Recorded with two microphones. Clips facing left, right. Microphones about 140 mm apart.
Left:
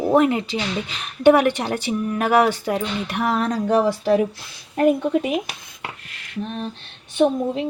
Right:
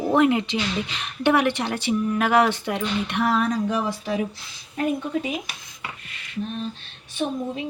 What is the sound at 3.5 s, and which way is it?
Speech, 75° left (ahead or behind).